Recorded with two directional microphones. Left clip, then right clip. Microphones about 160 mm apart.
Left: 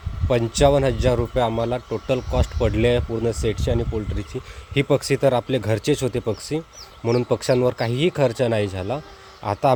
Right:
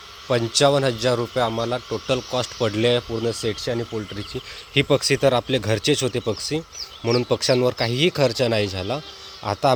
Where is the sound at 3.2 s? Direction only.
25° left (ahead or behind).